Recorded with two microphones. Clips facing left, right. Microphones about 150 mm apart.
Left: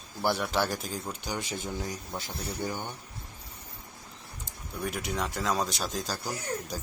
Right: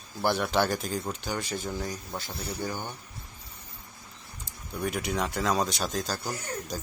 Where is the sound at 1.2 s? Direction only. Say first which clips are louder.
Right 2 dB; 15° left (ahead or behind).